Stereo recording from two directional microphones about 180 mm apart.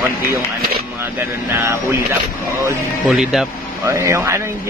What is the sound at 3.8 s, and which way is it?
Speech, 15° right (ahead or behind).